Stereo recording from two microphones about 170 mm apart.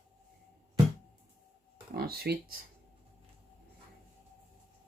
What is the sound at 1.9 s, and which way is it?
Speech, 65° right (ahead or behind).